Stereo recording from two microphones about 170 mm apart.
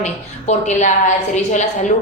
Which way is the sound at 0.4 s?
45° left (ahead or behind).